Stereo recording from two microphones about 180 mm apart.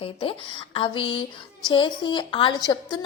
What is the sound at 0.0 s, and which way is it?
A woman's voice, 30° left (ahead or behind).